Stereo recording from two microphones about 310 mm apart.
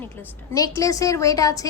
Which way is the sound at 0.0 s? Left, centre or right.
Centre.